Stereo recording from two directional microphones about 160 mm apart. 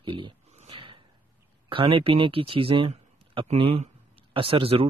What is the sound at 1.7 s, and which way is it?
Speech, 35° right (ahead or behind).